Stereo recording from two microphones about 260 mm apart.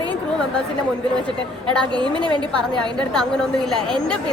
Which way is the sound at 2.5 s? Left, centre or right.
Centre.